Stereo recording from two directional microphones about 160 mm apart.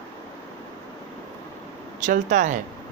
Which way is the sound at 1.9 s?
55° right (ahead or behind).